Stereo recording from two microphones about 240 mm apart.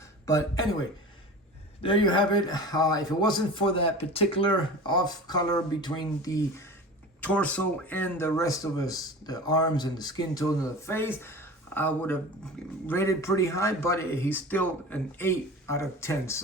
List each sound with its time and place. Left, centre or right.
0.3 s a man's voice: centre
1.8 s a man's voice: centre
7.2 s a man's voice: centre
11.2 s a sound: centre
12.6 s a man's voice: centre